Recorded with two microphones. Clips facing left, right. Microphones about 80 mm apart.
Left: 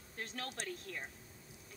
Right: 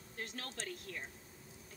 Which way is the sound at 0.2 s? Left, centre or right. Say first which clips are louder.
Left 1 dB; left.